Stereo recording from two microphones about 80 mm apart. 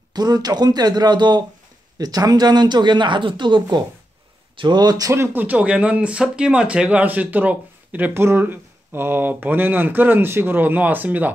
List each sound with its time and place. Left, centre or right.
0.1 s speech: right
2.0 s speech: right
4.6 s speech: right
5.1 s speech: right